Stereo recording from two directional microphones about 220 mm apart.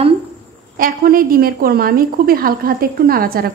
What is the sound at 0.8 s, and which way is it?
A woman's voice, 40° right (ahead or behind).